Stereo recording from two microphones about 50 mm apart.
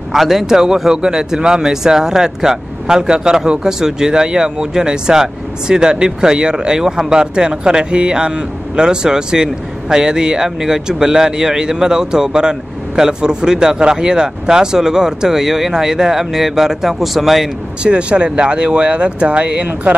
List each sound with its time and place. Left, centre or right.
0.1 s speech: centre
17.8 s speech: right